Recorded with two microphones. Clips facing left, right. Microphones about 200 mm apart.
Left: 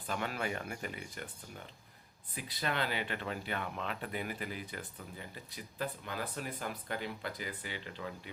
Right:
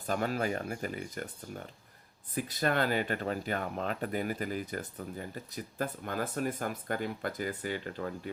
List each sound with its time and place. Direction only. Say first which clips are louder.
0.1 s speech: right 6 dB; 40° right (ahead or behind)